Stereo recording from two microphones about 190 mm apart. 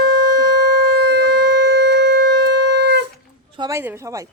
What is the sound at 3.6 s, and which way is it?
Speech, 15° right (ahead or behind).